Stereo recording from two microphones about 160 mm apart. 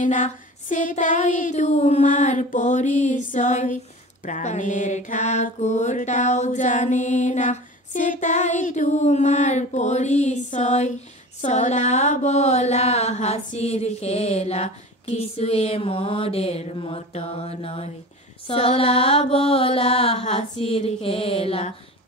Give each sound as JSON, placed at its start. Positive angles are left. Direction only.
{"t": 0.0, "sound": "female singing", "side_deg": 50}
{"t": 11.4, "sound": "mantra", "side_deg": 50}